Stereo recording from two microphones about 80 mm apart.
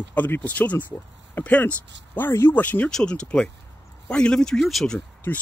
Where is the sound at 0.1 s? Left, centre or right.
Left.